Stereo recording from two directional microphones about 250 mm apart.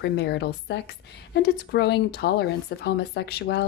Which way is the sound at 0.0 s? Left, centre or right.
Left.